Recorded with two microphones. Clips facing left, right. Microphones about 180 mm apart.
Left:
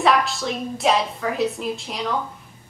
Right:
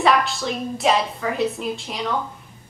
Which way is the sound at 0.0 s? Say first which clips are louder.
Even; centre (ahead or behind).